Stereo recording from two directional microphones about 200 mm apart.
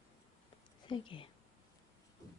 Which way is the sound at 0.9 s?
25° left (ahead or behind).